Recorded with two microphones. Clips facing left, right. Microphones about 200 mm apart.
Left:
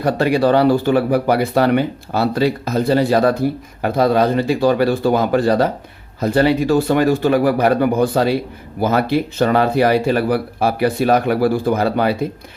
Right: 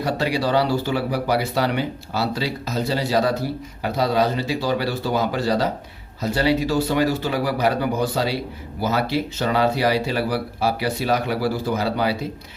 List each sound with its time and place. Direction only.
0.0 s speech: 55° left (ahead or behind)